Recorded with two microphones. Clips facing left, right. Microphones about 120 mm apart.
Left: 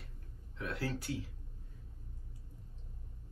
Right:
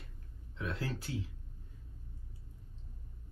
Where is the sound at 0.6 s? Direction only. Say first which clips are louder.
Right 1 dB; 30° right (ahead or behind).